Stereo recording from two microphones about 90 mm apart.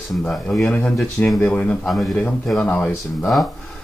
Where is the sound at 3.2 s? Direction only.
Centre (ahead or behind).